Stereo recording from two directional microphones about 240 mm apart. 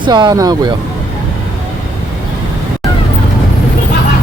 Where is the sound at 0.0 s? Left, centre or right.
Centre.